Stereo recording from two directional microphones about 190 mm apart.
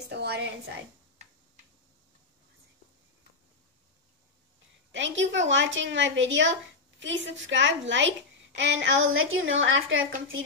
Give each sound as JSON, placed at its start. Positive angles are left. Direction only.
{"t": 0.1, "sound": "a woman's voice", "side_deg": -60}
{"t": 4.9, "sound": "a woman's voice", "side_deg": -75}